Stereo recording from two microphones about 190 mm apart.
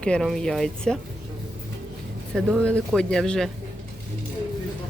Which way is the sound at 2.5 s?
5° left (ahead or behind).